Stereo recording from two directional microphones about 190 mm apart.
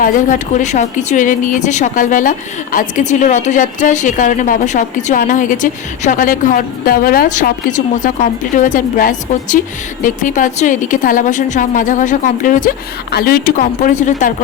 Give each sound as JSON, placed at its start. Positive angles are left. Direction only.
{"t": 0.0, "sound": "a woman's voice", "side_deg": 45}